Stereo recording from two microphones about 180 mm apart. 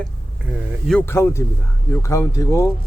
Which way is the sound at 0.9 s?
10° left (ahead or behind).